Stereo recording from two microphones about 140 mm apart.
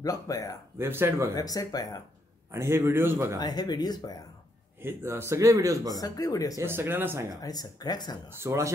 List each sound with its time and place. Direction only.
0.0 s speech: 25° left (ahead or behind)
0.7 s a man's voice: 15° right (ahead or behind)
1.3 s speech: 25° left (ahead or behind)
2.5 s a man's voice: 20° right (ahead or behind)
3.3 s speech: 30° left (ahead or behind)
4.7 s a man's voice: 15° right (ahead or behind)
5.9 s speech: 25° left (ahead or behind)
6.6 s a man's voice: 15° right (ahead or behind)
7.4 s speech: 30° left (ahead or behind)
8.3 s a man's voice: 20° right (ahead or behind)